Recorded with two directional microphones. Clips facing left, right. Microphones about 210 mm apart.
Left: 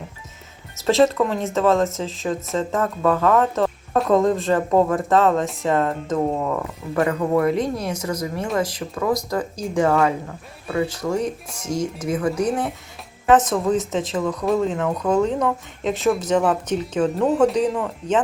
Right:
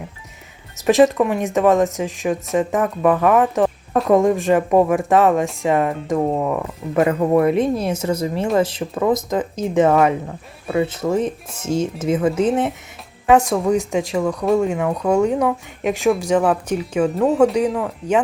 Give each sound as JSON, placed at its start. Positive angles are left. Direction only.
{"t": 0.8, "sound": "speech", "side_deg": -15}
{"t": 13.3, "sound": "speech", "side_deg": -10}